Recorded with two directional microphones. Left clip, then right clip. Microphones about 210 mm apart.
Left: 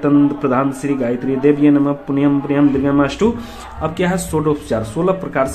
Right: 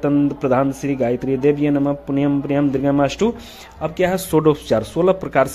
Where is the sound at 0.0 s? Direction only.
40° right (ahead or behind).